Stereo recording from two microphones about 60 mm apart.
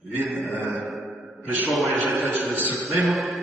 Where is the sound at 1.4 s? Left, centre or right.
Right.